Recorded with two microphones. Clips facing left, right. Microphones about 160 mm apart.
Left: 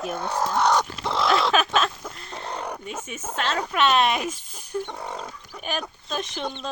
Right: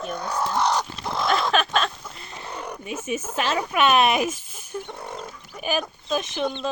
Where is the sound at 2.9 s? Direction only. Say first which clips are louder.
Right 5 dB; 10° right (ahead or behind).